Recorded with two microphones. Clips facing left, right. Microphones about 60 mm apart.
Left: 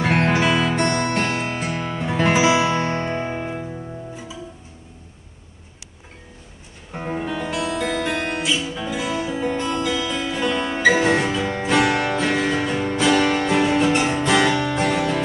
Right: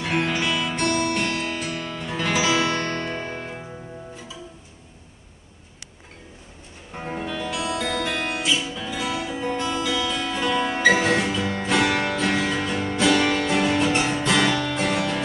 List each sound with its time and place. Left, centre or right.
0.0 s music: left; by 3.6 s centre
6.9 s music: centre
10.8 s music: centre
14.4 s music: left
14.8 s music: centre